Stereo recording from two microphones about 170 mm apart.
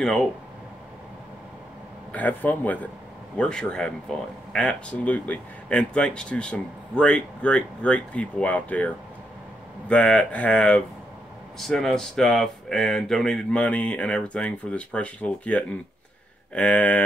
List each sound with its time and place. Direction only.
0.0 s speech: centre (ahead or behind)
2.1 s speech: 10° left (ahead or behind)